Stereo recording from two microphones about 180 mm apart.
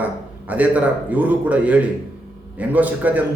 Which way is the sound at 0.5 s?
10° right (ahead or behind).